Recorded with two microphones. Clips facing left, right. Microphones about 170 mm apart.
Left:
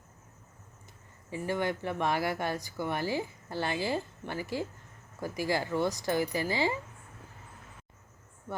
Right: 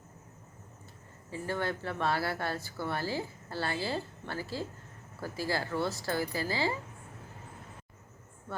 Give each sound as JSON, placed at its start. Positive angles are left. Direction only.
{"t": 1.3, "sound": "speech", "side_deg": 15}